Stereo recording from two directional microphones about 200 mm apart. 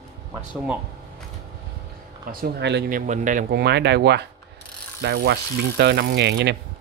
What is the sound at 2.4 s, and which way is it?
Speech, 60° right (ahead or behind).